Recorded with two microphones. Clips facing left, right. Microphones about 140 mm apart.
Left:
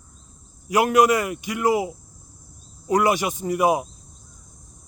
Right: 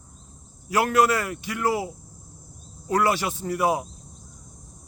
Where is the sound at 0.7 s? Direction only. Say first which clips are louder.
Left 3 dB; 15° left (ahead or behind).